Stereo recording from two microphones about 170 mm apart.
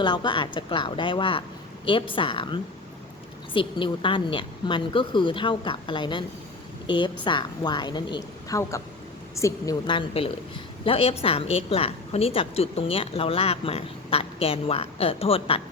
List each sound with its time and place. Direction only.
0.0 s a woman's voice: 25° left (ahead or behind)
9.8 s a woman's voice: 30° left (ahead or behind)